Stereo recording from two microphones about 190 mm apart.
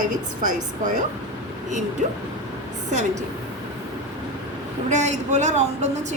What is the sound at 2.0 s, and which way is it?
A woman's voice, 40° right (ahead or behind).